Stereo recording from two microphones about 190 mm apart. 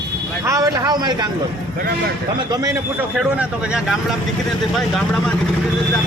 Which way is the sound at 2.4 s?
20° right (ahead or behind).